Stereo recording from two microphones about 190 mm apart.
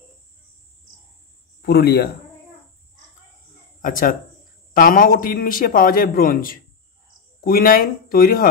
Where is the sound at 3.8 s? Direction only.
45° left (ahead or behind).